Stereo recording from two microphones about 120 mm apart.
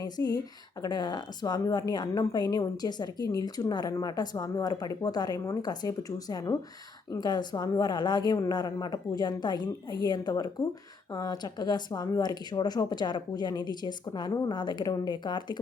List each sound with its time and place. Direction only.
0.0 s a woman's voice: 30° left (ahead or behind)